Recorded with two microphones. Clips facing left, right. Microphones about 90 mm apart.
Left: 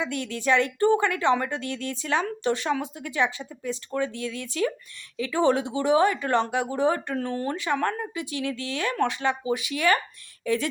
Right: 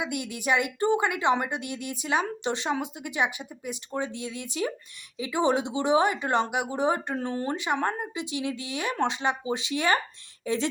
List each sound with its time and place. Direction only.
0.0 s a woman's voice: 15° right (ahead or behind)